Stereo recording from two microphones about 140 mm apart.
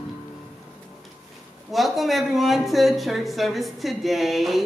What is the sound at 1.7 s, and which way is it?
Speech, centre (ahead or behind).